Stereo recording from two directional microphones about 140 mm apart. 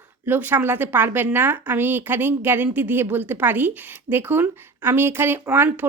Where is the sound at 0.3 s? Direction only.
15° right (ahead or behind).